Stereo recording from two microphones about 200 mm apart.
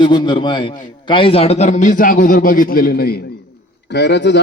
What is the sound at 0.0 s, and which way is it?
A man's voice, 20° left (ahead or behind).